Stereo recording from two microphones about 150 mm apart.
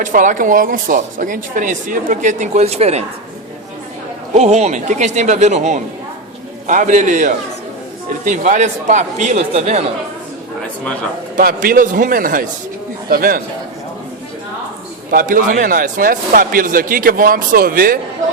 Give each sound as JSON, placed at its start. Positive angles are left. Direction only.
{"t": 0.0, "sound": "speech", "side_deg": -60}
{"t": 4.4, "sound": "speech", "side_deg": -45}
{"t": 11.3, "sound": "a man's voice", "side_deg": -70}
{"t": 15.1, "sound": "a man's voice", "side_deg": -65}